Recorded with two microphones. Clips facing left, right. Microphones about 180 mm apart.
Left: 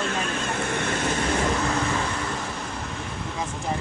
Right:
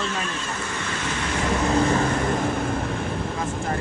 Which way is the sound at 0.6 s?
55° left (ahead or behind).